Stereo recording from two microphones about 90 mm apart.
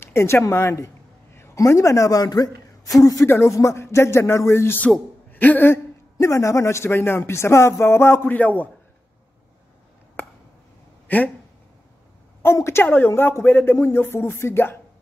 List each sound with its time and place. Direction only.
0.0 s a woman's voice: 30° left (ahead or behind)
6.1 s speech: 35° left (ahead or behind); by 8.6 s 20° left (ahead or behind)
11.1 s speech: 20° left (ahead or behind)
12.5 s speech: 30° left (ahead or behind)